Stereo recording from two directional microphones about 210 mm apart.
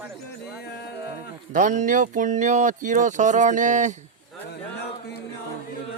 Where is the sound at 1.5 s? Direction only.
40° right (ahead or behind).